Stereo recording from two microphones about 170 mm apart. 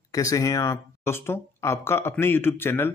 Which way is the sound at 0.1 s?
20° left (ahead or behind).